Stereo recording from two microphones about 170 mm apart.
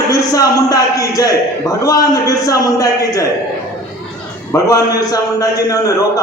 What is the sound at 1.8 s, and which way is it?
A man's voice, 20° left (ahead or behind).